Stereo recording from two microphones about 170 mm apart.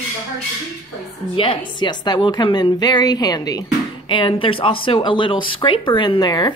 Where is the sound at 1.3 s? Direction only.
30° left (ahead or behind).